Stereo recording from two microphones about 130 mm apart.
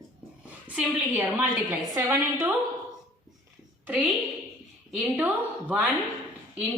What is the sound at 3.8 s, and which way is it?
Speech, 15° right (ahead or behind).